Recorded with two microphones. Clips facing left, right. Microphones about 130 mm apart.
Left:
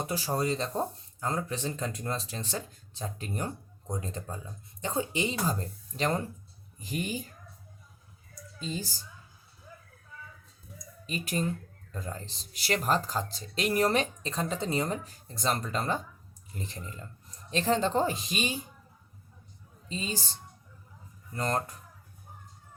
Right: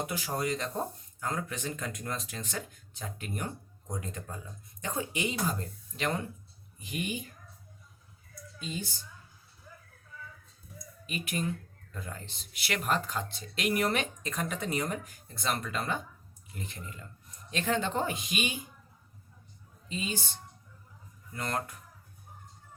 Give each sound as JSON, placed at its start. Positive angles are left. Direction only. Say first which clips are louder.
{"t": 0.0, "sound": "speech", "louder": "left 3 dB", "side_deg": 35}
{"t": 8.5, "sound": "a woman's voice", "louder": "left 2 dB", "side_deg": 35}
{"t": 11.0, "sound": "speech", "louder": "left 2 dB", "side_deg": 35}
{"t": 19.9, "sound": "speech", "louder": "even", "side_deg": 35}
{"t": 21.3, "sound": "speech", "louder": "left 4 dB", "side_deg": 35}